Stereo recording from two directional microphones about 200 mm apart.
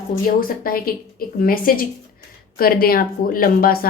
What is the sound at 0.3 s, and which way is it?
Speech, 45° left (ahead or behind).